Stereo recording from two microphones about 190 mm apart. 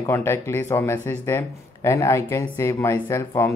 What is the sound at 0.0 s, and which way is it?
Speech, 15° left (ahead or behind).